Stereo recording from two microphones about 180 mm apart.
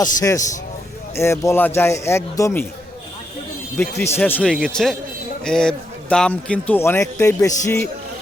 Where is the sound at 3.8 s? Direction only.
15° left (ahead or behind).